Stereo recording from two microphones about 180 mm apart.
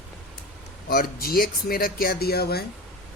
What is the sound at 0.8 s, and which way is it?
Speech, 55° left (ahead or behind).